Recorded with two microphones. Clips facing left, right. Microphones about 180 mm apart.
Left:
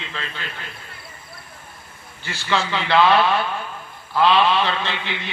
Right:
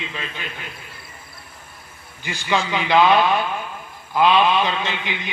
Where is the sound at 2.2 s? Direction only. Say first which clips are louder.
Right 1 dB; 15° right (ahead or behind).